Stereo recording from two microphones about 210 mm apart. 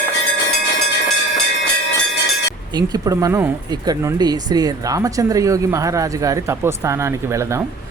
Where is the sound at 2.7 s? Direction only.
20° right (ahead or behind).